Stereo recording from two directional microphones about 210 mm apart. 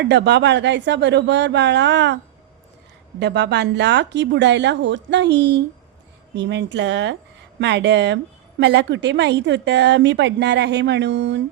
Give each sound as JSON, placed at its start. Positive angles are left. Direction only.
{"t": 0.0, "sound": "a woman's voice", "side_deg": -55}
{"t": 3.2, "sound": "a woman's voice", "side_deg": -55}